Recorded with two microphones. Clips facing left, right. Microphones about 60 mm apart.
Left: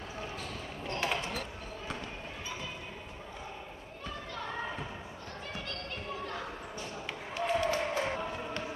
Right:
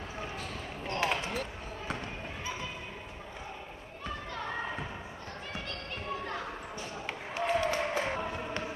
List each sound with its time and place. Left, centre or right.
0.8 s basketball bounce: right
7.1 s basketball bounce: right
7.6 s music: centre